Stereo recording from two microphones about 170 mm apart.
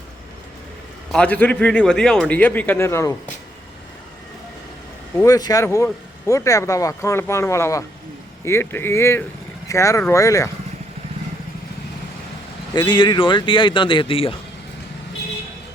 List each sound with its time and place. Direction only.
1.1 s speech: 5° left (ahead or behind)
5.1 s speech: 20° left (ahead or behind)
12.7 s speech: 25° left (ahead or behind)